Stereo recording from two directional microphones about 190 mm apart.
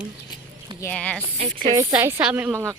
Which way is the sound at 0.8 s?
10° left (ahead or behind).